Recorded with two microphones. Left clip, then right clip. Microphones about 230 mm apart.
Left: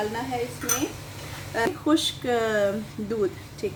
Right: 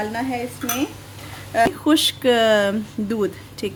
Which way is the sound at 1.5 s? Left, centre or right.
Right.